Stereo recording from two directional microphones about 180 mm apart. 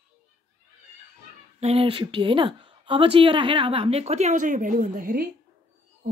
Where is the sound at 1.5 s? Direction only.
35° right (ahead or behind).